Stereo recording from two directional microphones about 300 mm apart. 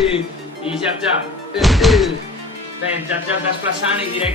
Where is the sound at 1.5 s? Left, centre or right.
Centre.